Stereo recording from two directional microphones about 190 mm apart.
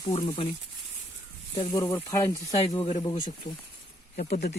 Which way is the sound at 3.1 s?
40° left (ahead or behind).